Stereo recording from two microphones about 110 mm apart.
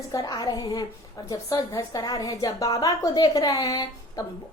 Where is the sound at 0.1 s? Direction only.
35° left (ahead or behind).